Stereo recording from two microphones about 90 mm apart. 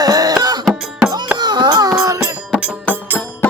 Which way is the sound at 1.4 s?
55° right (ahead or behind).